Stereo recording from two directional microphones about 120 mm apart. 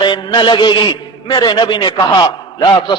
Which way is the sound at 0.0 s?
40° left (ahead or behind).